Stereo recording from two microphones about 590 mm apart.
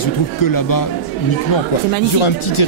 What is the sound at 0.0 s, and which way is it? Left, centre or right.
Speech, left.